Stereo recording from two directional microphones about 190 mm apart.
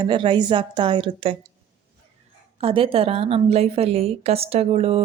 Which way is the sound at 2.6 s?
30° right (ahead or behind).